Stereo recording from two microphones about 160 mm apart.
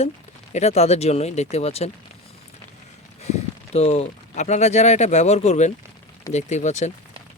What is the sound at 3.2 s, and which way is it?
Speech, 40° left (ahead or behind).